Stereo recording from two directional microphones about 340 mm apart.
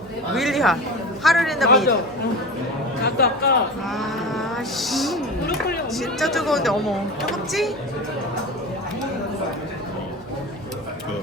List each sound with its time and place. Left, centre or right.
0.3 s speech: centre
3.0 s speech: left
3.9 s speech: centre